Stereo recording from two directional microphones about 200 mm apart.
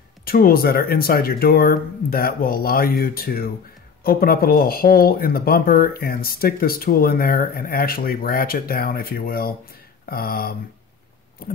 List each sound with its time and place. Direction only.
0.2 s speech: 45° left (ahead or behind)